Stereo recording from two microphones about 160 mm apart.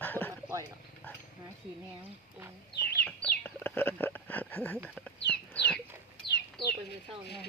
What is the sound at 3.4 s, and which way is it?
Whispering, 10° left (ahead or behind).